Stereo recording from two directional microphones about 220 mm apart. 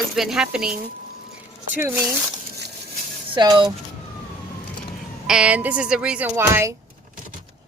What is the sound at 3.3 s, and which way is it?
Speech, 20° right (ahead or behind).